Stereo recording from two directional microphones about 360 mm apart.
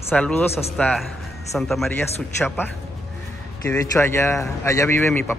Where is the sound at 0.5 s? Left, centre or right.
Centre.